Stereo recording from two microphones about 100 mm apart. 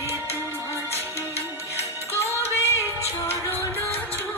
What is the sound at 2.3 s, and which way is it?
Music, 25° left (ahead or behind).